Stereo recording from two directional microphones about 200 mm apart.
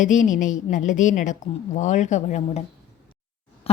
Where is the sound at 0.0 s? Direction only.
40° left (ahead or behind).